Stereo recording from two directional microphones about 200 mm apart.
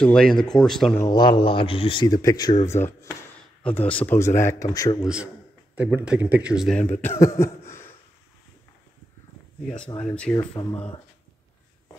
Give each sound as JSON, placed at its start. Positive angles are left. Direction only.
{"t": 0.0, "sound": "speech", "side_deg": 5}
{"t": 1.0, "sound": "speech", "side_deg": 20}
{"t": 5.0, "sound": "speech", "side_deg": -5}
{"t": 9.7, "sound": "speech", "side_deg": 5}